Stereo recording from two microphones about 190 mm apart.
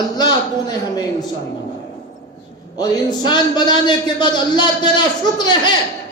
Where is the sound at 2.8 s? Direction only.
25° left (ahead or behind).